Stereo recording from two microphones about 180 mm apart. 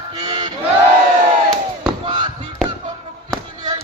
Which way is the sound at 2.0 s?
25° right (ahead or behind).